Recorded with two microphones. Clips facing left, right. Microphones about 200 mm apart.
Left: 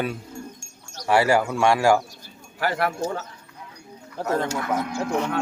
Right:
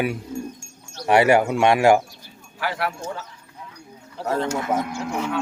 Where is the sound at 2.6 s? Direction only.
45° left (ahead or behind).